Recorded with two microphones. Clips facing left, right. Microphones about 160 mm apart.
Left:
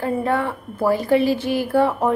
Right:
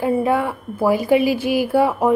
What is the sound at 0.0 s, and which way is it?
A woman's voice, 10° right (ahead or behind).